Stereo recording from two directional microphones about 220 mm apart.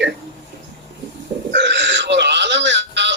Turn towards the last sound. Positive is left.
turn(degrees=-55)  # may be behind; listen again after turning